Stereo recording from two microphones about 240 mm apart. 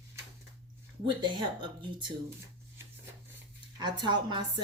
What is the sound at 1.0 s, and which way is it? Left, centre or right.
A woman's voice, centre.